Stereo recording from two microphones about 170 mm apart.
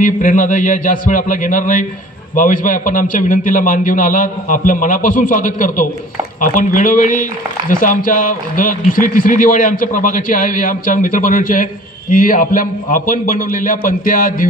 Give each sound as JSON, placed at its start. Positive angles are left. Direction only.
{"t": 0.0, "sound": "speech", "side_deg": 50}